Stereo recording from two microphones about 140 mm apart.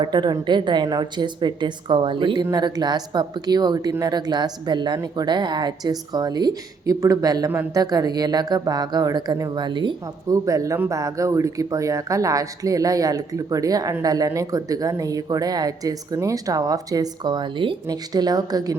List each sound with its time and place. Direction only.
0.0 s a woman's voice: 30° right (ahead or behind)